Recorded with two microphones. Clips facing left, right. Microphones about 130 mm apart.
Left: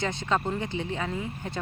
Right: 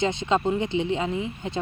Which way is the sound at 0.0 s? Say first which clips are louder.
Right 5 dB; 20° right (ahead or behind).